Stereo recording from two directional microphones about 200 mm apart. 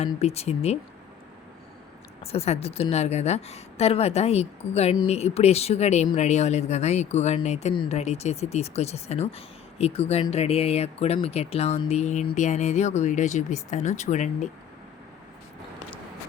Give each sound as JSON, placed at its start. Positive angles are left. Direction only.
{"t": 0.0, "sound": "speech", "side_deg": 30}
{"t": 2.2, "sound": "speech", "side_deg": 30}